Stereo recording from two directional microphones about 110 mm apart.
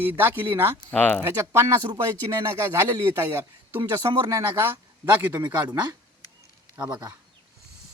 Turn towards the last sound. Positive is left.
turn(degrees=-10)  # may be behind; listen again after turning